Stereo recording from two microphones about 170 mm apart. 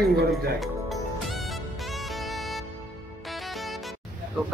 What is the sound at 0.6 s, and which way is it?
Music, centre (ahead or behind).